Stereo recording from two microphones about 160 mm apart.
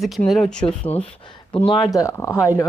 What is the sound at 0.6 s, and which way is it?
Speech, 35° left (ahead or behind).